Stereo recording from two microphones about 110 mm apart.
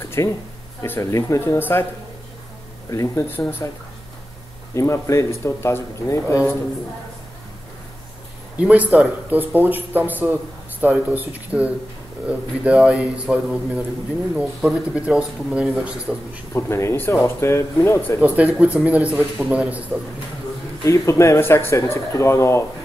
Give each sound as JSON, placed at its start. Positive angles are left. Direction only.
{"t": 0.2, "sound": "speech", "side_deg": 30}
{"t": 2.9, "sound": "speech", "side_deg": 25}
{"t": 4.7, "sound": "speech", "side_deg": 25}
{"t": 8.5, "sound": "speech", "side_deg": -15}
{"t": 16.5, "sound": "speech", "side_deg": 25}
{"t": 18.2, "sound": "speech", "side_deg": -15}
{"t": 20.8, "sound": "speech", "side_deg": 25}